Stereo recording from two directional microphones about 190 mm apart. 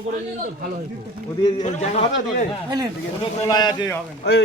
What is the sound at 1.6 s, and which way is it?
Speech, 35° left (ahead or behind).